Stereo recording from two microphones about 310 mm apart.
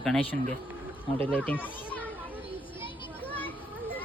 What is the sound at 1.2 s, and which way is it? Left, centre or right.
Speech, centre.